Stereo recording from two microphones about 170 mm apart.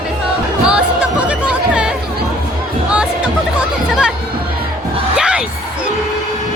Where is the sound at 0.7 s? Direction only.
5° right (ahead or behind).